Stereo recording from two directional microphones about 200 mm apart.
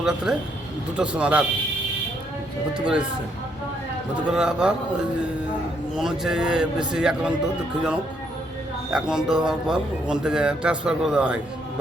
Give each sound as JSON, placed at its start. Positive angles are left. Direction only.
{"t": 0.0, "sound": "speech", "side_deg": -5}
{"t": 2.7, "sound": "speech", "side_deg": -5}
{"t": 4.1, "sound": "speech", "side_deg": -5}
{"t": 6.0, "sound": "speech", "side_deg": 0}
{"t": 8.9, "sound": "speech", "side_deg": -5}